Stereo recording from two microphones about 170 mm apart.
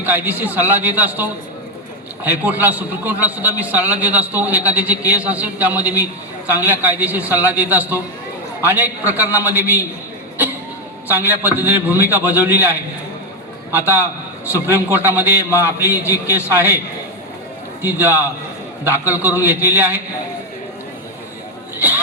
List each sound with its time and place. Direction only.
0.0 s a man's voice: 10° right (ahead or behind)
11.1 s a man's voice: 10° right (ahead or behind)
15.9 s a man's voice: 20° left (ahead or behind)
16.5 s a man's voice: 15° right (ahead or behind)
17.8 s a man's voice: 10° right (ahead or behind)
21.8 s speech: 10° right (ahead or behind)